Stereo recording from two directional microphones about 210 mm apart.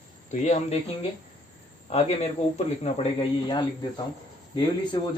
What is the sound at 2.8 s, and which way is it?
Speech, 25° left (ahead or behind).